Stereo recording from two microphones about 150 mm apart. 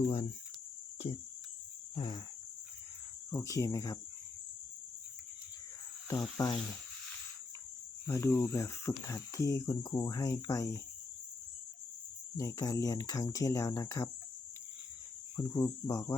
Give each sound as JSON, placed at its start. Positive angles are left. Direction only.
{"t": 2.0, "sound": "speech", "side_deg": 30}
{"t": 3.2, "sound": "speech", "side_deg": 20}
{"t": 6.1, "sound": "speech", "side_deg": 25}
{"t": 8.0, "sound": "speech", "side_deg": 20}
{"t": 12.4, "sound": "speech", "side_deg": 25}
{"t": 15.4, "sound": "speech", "side_deg": 25}